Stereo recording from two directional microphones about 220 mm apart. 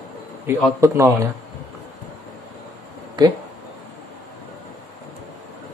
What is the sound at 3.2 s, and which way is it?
Speech, 20° right (ahead or behind).